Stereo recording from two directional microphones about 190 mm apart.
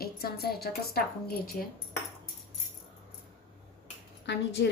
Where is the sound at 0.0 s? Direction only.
55° left (ahead or behind).